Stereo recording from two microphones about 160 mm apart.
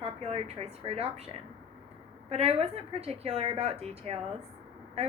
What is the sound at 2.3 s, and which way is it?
A woman's voice, 40° right (ahead or behind).